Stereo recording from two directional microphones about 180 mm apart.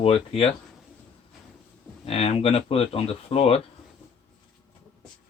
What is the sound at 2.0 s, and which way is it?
Speech, 35° left (ahead or behind).